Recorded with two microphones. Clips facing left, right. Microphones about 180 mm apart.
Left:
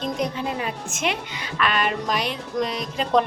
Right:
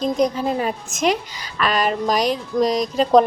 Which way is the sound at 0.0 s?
40° right (ahead or behind).